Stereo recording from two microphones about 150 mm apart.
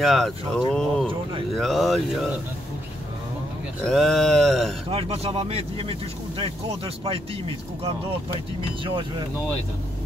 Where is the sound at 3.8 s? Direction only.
Centre (ahead or behind).